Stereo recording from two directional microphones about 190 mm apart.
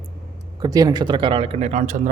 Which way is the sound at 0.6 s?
20° right (ahead or behind).